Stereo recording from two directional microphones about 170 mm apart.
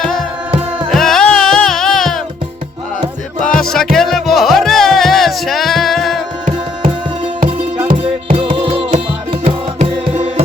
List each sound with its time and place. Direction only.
0.0 s music: centre (ahead or behind)
3.4 s music: 5° left (ahead or behind)
8.3 s music: 35° right (ahead or behind)